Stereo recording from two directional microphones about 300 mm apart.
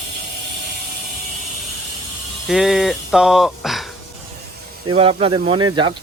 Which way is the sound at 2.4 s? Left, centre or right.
Centre.